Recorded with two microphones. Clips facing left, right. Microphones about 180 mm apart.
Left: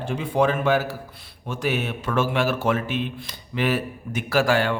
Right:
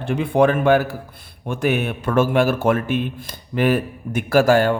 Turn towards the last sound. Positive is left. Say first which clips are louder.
# right 6 dB
turn(degrees=-45)  # may be behind; listen again after turning